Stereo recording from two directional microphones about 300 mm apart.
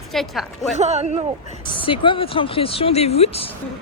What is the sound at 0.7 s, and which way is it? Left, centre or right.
Speech, right.